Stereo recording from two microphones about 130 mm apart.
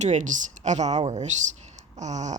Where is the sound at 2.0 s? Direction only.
65° right (ahead or behind).